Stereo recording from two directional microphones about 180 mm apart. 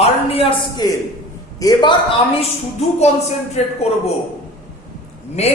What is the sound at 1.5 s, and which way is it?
Speech, 20° left (ahead or behind).